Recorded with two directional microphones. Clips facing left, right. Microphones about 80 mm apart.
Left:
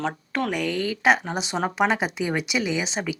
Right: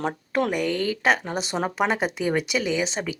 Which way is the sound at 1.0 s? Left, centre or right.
Centre.